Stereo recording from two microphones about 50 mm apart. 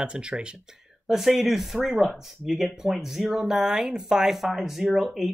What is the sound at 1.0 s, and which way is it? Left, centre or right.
Speech, centre.